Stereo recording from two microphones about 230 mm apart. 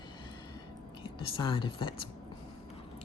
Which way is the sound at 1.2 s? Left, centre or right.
Left.